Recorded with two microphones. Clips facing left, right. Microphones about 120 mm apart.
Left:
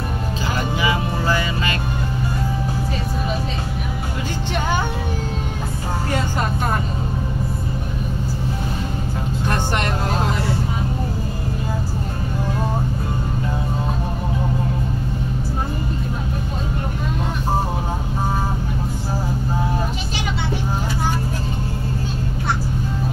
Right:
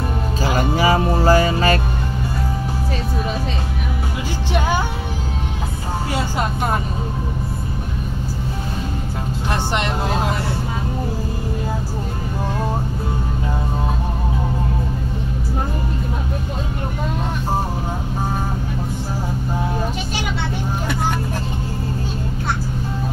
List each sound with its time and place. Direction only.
0.6 s music: 40° right (ahead or behind)